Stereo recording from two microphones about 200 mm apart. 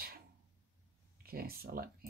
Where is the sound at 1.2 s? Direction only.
50° right (ahead or behind).